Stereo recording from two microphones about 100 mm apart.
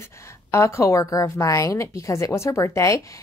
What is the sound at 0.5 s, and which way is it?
A woman's voice, 30° left (ahead or behind).